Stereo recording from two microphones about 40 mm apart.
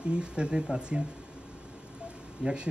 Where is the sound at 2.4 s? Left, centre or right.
Right.